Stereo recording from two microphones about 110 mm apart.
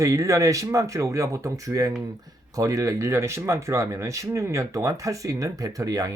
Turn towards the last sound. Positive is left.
turn(degrees=-35)  # may be behind; listen again after turning